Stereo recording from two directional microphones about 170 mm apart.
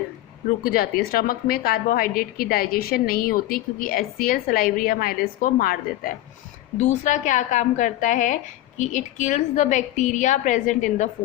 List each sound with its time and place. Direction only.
0.6 s a woman's voice: 60° left (ahead or behind)
6.7 s a woman's voice: 45° left (ahead or behind)